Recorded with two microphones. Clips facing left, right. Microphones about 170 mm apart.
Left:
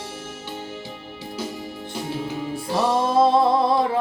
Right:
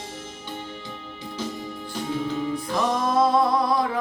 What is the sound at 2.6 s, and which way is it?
Music, 30° left (ahead or behind).